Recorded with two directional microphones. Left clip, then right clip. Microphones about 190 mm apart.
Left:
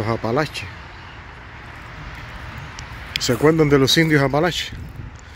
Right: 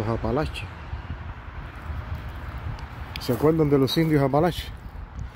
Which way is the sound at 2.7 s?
5° left (ahead or behind).